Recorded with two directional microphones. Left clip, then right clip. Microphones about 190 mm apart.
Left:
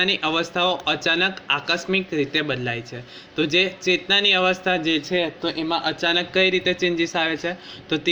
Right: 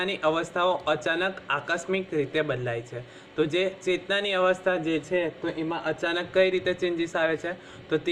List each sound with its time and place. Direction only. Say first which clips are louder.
0.0 s a man's voice: left 5 dB; 45° left (ahead or behind)